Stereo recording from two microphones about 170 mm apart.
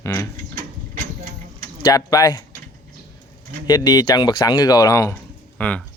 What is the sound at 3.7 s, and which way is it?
Speech, 25° left (ahead or behind).